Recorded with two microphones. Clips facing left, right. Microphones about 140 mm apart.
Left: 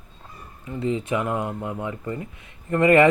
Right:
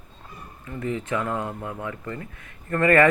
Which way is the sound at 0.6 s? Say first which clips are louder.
Left 3 dB; 20° left (ahead or behind).